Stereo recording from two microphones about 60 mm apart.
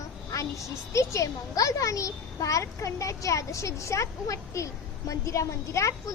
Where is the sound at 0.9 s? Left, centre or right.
Left.